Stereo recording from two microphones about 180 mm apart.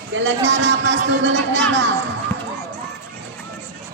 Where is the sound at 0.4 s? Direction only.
80° right.